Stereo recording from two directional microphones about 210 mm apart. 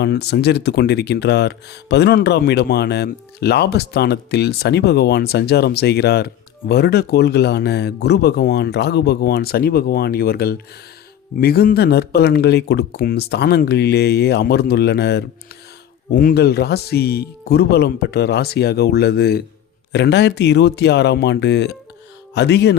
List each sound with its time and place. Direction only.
0.0 s speech: 50° left (ahead or behind)